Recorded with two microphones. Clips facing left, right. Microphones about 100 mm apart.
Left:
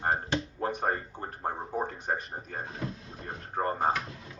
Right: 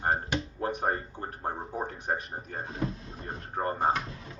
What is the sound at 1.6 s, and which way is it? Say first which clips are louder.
Speech: left 2 dB; centre (ahead or behind).